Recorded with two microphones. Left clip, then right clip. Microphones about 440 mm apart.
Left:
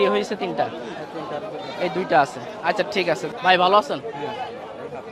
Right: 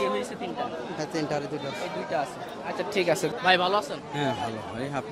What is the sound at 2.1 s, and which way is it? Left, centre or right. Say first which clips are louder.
Speech: left 12 dB; left.